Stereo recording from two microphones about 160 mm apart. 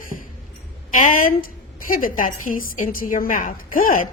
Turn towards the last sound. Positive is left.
turn(degrees=60)  # may be behind; listen again after turning